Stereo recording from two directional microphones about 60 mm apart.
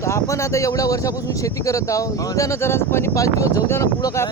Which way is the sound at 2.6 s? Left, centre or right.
Left.